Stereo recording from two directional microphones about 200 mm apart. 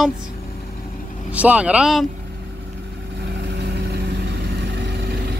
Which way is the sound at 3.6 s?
55° right (ahead or behind).